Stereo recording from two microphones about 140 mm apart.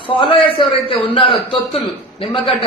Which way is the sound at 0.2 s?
40° left (ahead or behind).